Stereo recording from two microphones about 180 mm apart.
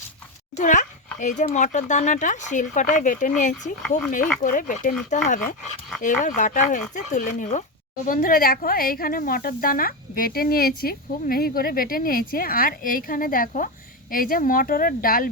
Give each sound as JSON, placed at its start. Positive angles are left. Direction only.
{"t": 0.5, "sound": "speech", "side_deg": 45}